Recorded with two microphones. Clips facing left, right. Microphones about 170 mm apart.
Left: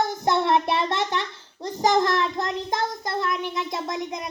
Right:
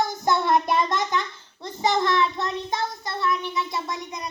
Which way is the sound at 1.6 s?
40° left (ahead or behind).